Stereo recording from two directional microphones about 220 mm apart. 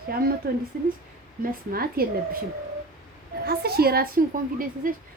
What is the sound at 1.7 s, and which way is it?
Speech, 40° right (ahead or behind).